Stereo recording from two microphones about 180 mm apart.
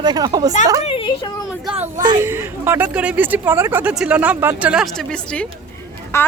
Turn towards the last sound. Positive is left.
turn(degrees=15)  # may be behind; listen again after turning